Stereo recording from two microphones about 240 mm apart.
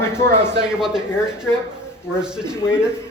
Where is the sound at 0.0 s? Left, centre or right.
Centre.